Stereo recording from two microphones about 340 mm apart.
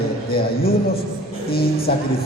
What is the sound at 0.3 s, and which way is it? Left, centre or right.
A man's voice, left.